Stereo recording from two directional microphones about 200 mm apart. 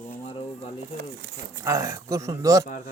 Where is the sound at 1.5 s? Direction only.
15° right (ahead or behind).